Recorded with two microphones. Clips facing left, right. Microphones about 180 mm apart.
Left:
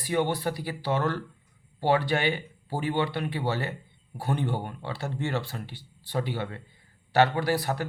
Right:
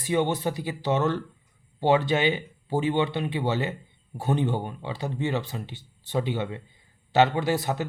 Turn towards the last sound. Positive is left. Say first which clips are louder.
# right 1 dB
turn(degrees=-20)  # may be behind; listen again after turning